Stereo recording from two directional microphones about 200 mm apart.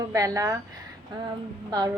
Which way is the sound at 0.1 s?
15° right (ahead or behind).